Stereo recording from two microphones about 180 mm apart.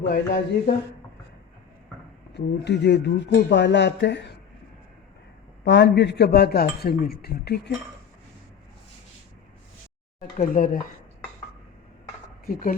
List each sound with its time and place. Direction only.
0.0 s speech: 60° left (ahead or behind)
2.3 s speech: 70° left (ahead or behind)
5.6 s speech: 75° left (ahead or behind)
10.2 s speech: 50° left (ahead or behind)
12.5 s speech: 50° left (ahead or behind)